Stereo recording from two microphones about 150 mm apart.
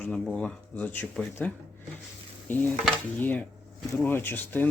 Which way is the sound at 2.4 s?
15° left (ahead or behind).